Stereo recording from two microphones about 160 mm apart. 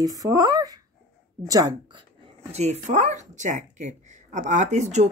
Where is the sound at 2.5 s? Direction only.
45° right (ahead or behind).